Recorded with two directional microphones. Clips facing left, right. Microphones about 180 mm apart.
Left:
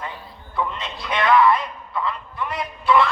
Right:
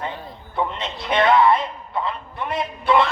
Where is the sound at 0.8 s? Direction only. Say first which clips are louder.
Right 4 dB; 25° right (ahead or behind).